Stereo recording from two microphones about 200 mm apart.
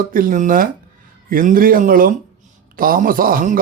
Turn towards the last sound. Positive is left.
turn(degrees=-45)  # may be behind; listen again after turning